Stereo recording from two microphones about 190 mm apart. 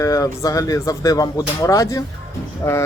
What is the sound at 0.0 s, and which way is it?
Speech, 15° left (ahead or behind).